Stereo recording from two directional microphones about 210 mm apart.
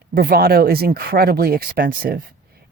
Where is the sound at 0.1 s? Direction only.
45° right (ahead or behind).